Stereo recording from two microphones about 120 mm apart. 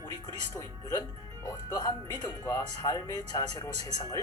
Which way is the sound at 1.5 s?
35° left (ahead or behind).